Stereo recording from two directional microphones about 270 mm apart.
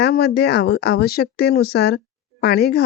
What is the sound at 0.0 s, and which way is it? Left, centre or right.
Speech, left.